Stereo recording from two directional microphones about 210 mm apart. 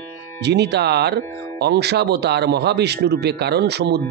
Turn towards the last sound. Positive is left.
turn(degrees=-55)  # may be behind; listen again after turning